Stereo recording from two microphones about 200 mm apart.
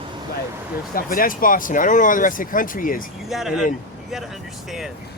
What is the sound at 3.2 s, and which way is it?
Speech, centre (ahead or behind).